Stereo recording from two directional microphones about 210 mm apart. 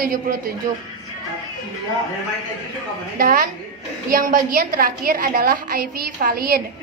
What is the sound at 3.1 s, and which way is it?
A woman's voice, 45° right (ahead or behind).